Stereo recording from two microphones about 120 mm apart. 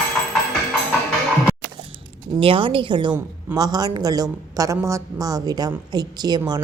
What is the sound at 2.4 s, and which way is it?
A woman's voice, 45° right (ahead or behind).